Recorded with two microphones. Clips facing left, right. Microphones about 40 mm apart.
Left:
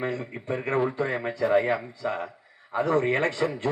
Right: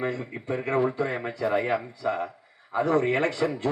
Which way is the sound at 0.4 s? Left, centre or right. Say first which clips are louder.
Right 1 dB; left.